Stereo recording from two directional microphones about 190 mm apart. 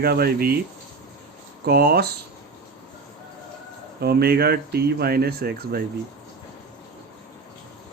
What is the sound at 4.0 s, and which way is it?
Speech, 55° right (ahead or behind).